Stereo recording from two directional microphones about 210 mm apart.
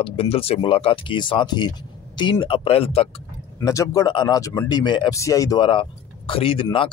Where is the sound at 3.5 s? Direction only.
15° left (ahead or behind).